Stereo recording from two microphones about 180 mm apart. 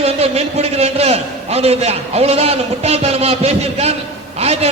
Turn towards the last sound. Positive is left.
turn(degrees=-35)  # may be behind; listen again after turning